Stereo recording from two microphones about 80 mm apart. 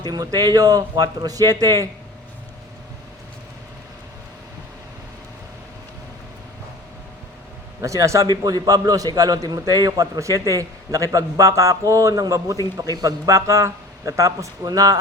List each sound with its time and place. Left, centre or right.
0.0 s a man's voice: right
7.8 s a man's voice: right
8.3 s a man's voice: right